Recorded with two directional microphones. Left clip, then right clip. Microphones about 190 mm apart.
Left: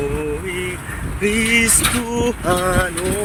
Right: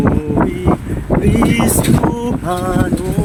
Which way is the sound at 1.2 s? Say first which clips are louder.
Left 1 dB; 30° right (ahead or behind).